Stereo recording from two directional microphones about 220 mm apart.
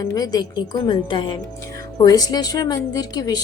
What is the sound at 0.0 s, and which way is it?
Speech, 15° left (ahead or behind).